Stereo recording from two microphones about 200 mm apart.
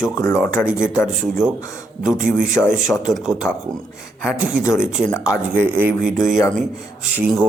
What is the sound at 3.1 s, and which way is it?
Speech, 5° right (ahead or behind).